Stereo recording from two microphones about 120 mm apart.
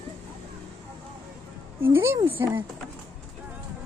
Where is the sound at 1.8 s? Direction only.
20° right (ahead or behind).